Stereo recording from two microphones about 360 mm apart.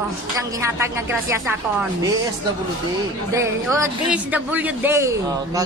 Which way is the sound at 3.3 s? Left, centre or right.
Centre.